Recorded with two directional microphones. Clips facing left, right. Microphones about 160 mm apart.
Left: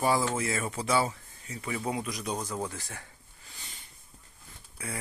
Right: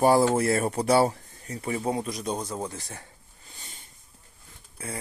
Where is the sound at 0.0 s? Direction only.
40° right (ahead or behind).